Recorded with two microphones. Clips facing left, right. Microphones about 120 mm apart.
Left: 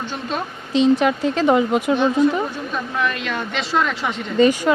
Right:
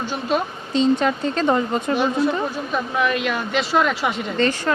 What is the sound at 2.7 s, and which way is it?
Speech, 5° right (ahead or behind).